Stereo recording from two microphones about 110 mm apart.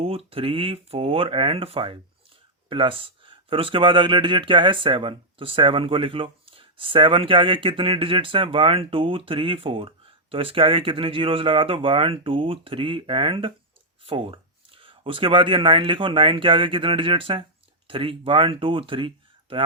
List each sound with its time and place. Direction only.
0.0 s speech: 60° right (ahead or behind)